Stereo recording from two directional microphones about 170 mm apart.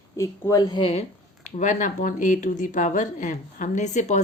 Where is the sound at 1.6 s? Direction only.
45° left (ahead or behind).